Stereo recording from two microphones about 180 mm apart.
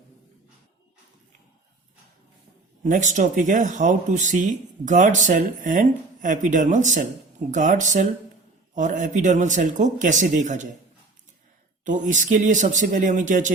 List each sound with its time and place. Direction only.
2.8 s speech: 45° right (ahead or behind)
11.9 s speech: 45° right (ahead or behind)